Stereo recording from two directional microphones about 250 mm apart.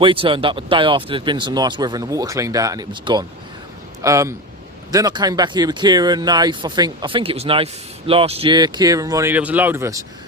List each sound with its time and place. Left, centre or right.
0.0 s speech: right